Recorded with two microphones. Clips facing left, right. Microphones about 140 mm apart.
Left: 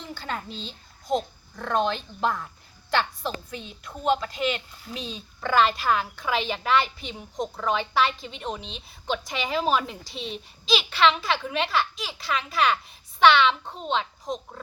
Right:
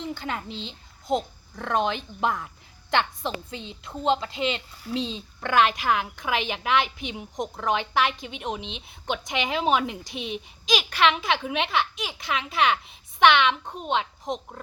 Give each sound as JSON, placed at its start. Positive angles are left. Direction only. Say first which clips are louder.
{"t": 0.1, "sound": "a child's voice", "louder": "right 2 dB", "side_deg": -20}